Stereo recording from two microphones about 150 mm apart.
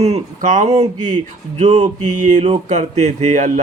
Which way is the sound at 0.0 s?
50° right (ahead or behind).